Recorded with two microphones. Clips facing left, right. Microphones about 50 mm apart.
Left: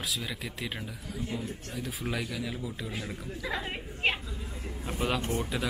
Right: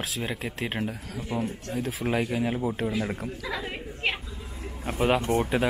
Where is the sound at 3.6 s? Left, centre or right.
Centre.